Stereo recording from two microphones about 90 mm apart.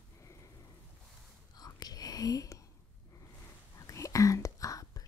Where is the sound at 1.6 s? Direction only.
45° left (ahead or behind).